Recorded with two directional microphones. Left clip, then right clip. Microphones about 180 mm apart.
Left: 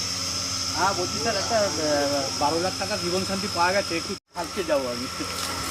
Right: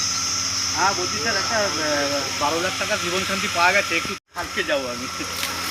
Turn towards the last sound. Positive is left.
turn(degrees=40)  # may be behind; listen again after turning